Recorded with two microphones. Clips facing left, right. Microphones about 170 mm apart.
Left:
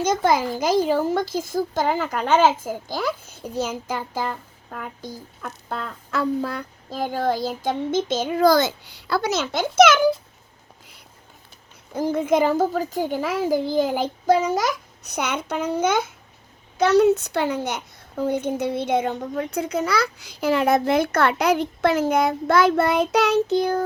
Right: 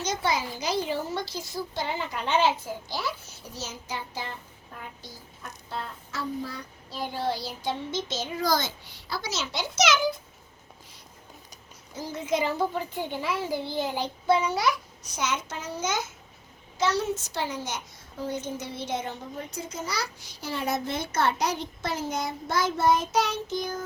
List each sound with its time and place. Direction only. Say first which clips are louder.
0.0 s a child's voice: left 8 dB; 50° left (ahead or behind)
4.7 s a child's voice: left 9 dB; 65° left (ahead or behind)
6.6 s a child's voice: left 7 dB; 50° left (ahead or behind)
11.9 s a child's voice: left 9 dB; 55° left (ahead or behind)
15.1 s a child's voice: left 5 dB; 60° left (ahead or behind)